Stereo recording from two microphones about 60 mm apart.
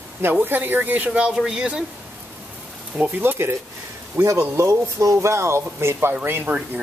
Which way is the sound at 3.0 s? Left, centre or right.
Right.